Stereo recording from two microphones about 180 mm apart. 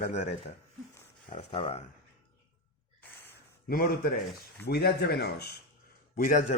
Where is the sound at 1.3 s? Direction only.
30° left (ahead or behind).